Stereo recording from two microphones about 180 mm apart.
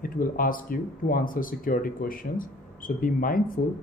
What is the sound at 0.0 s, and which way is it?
Speech, 50° left (ahead or behind).